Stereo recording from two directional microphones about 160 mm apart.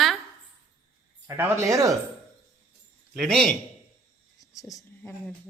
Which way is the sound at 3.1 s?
Centre (ahead or behind).